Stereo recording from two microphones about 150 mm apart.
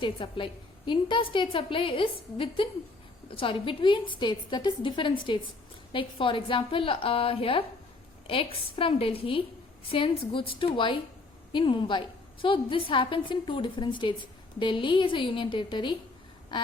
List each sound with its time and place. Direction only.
0.0 s a woman's voice: 30° left (ahead or behind)